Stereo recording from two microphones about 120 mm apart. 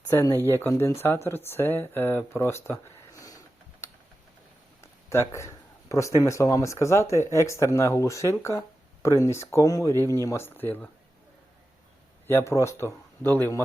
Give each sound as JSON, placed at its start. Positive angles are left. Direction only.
{"t": 0.3, "sound": "speech", "side_deg": 20}
{"t": 3.2, "sound": "a sound", "side_deg": 25}
{"t": 5.0, "sound": "speech", "side_deg": 25}
{"t": 8.4, "sound": "a sound", "side_deg": 20}
{"t": 9.2, "sound": "speech", "side_deg": 25}
{"t": 12.3, "sound": "speech", "side_deg": 20}